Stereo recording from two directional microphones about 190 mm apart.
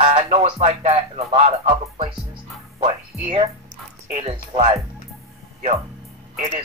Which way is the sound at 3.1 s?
Centre (ahead or behind).